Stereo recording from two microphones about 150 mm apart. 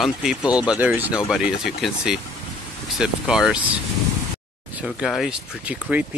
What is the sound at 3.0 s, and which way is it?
Speech, 5° right (ahead or behind).